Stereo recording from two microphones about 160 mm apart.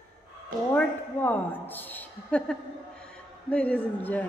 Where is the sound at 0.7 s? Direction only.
10° left (ahead or behind).